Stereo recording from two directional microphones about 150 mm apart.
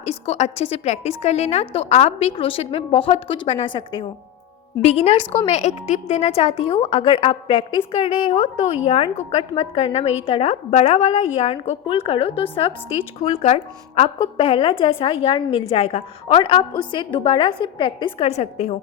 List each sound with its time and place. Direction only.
0.0 s a woman's voice: 45° left (ahead or behind)
4.8 s a woman's voice: 45° left (ahead or behind)